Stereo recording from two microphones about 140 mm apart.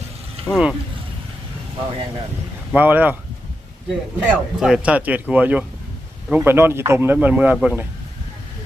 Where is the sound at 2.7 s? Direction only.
10° right (ahead or behind).